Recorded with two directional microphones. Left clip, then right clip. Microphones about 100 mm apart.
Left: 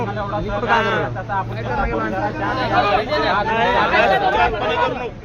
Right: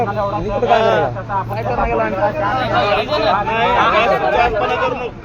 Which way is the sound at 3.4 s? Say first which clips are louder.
Right 2 dB; 45° left (ahead or behind).